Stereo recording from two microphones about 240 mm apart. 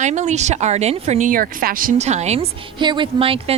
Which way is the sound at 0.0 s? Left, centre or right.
Right.